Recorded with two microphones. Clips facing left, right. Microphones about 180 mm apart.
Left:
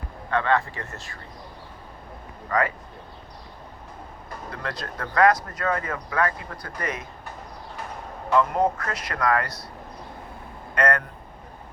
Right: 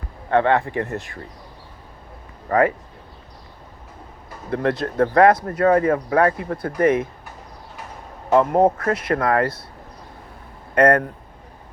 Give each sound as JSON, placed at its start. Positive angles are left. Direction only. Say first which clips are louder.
{"t": 0.3, "sound": "speech", "louder": "right 6 dB", "side_deg": -25}
{"t": 2.5, "sound": "speech", "louder": "right 7 dB", "side_deg": -30}
{"t": 4.5, "sound": "speech", "louder": "right 14 dB", "side_deg": -25}
{"t": 8.4, "sound": "speech", "louder": "right 6 dB", "side_deg": -25}
{"t": 10.8, "sound": "speech", "louder": "right 8 dB", "side_deg": -30}